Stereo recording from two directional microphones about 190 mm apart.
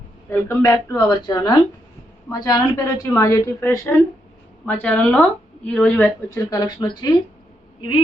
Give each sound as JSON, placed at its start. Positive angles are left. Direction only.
{"t": 0.3, "sound": "a woman's voice", "side_deg": 10}
{"t": 6.5, "sound": "speech", "side_deg": 20}